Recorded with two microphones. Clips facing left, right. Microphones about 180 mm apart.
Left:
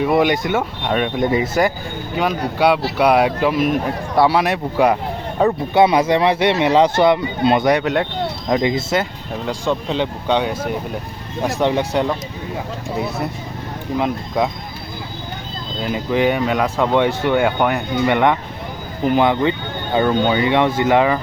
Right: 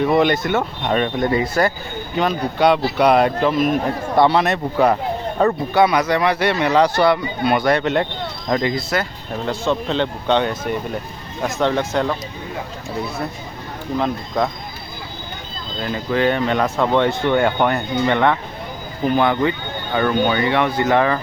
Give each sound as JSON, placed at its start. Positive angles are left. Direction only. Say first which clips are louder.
{"t": 0.0, "sound": "speech", "louder": "even", "side_deg": 10}
{"t": 1.3, "sound": "speech", "louder": "left 1 dB", "side_deg": 15}
{"t": 5.7, "sound": "speech", "louder": "left 4 dB", "side_deg": 25}
{"t": 8.7, "sound": "speech", "louder": "left 2 dB", "side_deg": 25}
{"t": 9.5, "sound": "speech", "louder": "even", "side_deg": 10}
{"t": 14.0, "sound": "speech", "louder": "left 1 dB", "side_deg": 10}
{"t": 15.8, "sound": "speech", "louder": "left 1 dB", "side_deg": 15}